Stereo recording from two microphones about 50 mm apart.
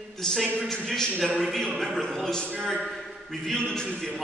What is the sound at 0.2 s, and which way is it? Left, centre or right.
A man's voice, centre.